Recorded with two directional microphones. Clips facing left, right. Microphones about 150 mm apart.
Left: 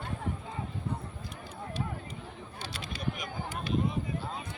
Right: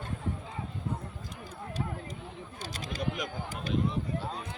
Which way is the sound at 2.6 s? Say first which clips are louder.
Right 1 dB; 45° right (ahead or behind).